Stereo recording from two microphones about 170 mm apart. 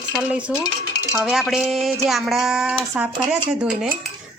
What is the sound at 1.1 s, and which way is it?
Speech, 5° right (ahead or behind).